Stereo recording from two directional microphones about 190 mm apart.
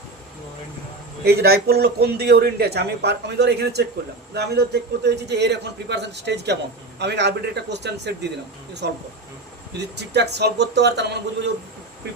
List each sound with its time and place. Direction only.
1.2 s speech: 55° right (ahead or behind)